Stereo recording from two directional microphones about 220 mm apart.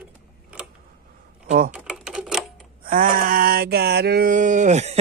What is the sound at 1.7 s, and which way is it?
Typewriter, 5° right (ahead or behind).